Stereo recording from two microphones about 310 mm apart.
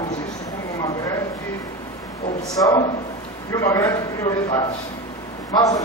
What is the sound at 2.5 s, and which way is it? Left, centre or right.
A man's voice, centre.